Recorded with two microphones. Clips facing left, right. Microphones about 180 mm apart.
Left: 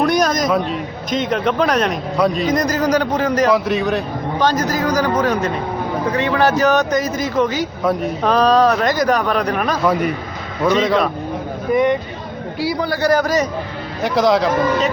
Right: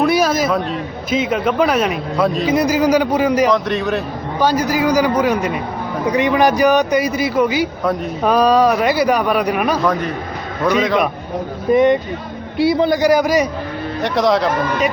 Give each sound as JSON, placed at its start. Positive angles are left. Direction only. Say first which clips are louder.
{"t": 0.0, "sound": "a man's voice", "louder": "right 1 dB", "side_deg": -5}
{"t": 3.5, "sound": "speech", "louder": "left 1 dB", "side_deg": 0}
{"t": 4.4, "sound": "a man's voice", "louder": "right 3 dB", "side_deg": -10}
{"t": 9.8, "sound": "a man's voice", "louder": "left 1 dB", "side_deg": 10}
{"t": 10.7, "sound": "speech", "louder": "even", "side_deg": 0}
{"t": 11.7, "sound": "a man's voice", "louder": "right 3 dB", "side_deg": -20}
{"t": 14.0, "sound": "speech", "louder": "left 1 dB", "side_deg": 0}